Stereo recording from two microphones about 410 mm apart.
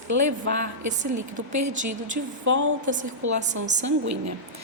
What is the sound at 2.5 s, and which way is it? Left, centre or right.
Speech, right.